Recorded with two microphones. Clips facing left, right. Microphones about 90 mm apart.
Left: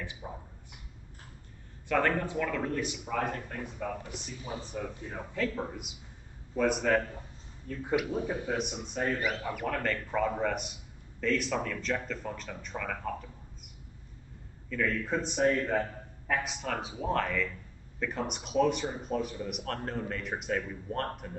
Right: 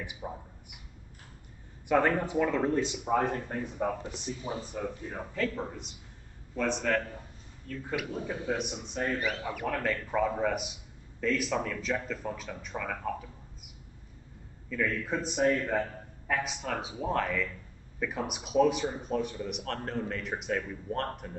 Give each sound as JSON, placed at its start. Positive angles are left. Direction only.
{"t": 0.0, "sound": "a sound", "side_deg": -15}
{"t": 1.9, "sound": "speech", "side_deg": -15}
{"t": 4.8, "sound": "speech", "side_deg": -5}
{"t": 8.5, "sound": "speech", "side_deg": 0}
{"t": 14.7, "sound": "speech", "side_deg": 0}